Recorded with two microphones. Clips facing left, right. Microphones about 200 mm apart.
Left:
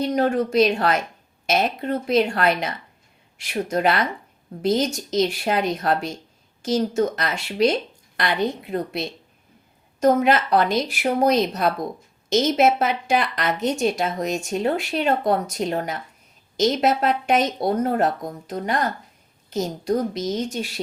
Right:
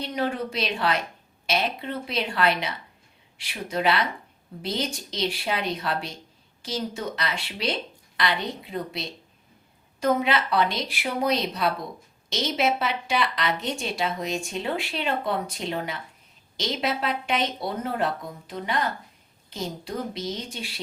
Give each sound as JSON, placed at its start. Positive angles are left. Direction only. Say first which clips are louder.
{"t": 0.0, "sound": "a woman's voice", "louder": "left 7 dB", "side_deg": 45}